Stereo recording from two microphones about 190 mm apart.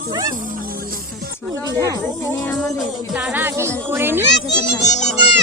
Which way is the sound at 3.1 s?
10° right (ahead or behind).